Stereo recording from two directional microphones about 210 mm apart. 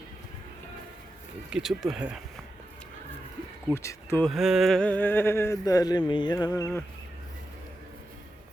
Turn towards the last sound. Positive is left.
turn(degrees=15)  # may be behind; listen again after turning